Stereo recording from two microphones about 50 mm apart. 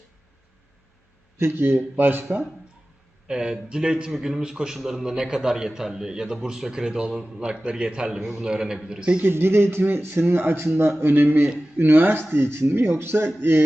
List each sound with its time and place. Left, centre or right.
1.4 s a man's voice: right
3.2 s a man's voice: centre
9.2 s speech: right
9.8 s a man's voice: right